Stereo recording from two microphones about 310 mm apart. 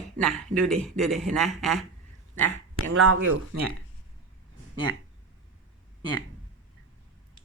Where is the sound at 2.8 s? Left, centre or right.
Right.